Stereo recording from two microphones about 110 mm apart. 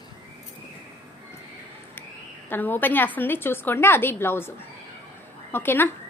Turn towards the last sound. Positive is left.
turn(degrees=20)  # may be behind; listen again after turning